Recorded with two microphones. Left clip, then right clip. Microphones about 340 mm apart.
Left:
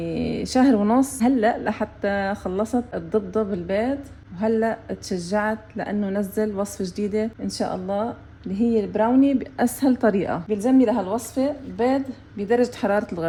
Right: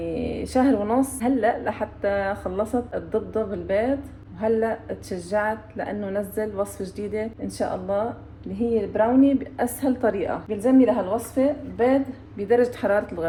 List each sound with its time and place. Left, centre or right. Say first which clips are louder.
0.0 s a woman's voice: left 1 dB; left